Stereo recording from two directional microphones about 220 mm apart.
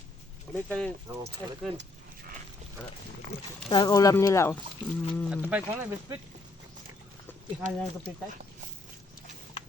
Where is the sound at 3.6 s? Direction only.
20° left (ahead or behind); by 5.4 s 5° left (ahead or behind).